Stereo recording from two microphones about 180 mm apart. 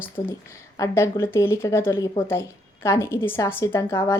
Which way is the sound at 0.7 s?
15° left (ahead or behind).